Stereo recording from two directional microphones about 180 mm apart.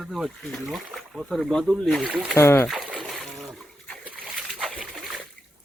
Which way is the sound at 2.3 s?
15° left (ahead or behind).